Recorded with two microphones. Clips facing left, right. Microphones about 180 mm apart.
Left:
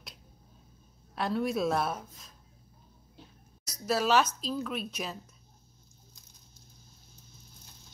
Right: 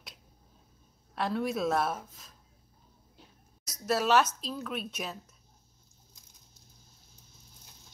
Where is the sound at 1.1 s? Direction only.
Centre (ahead or behind).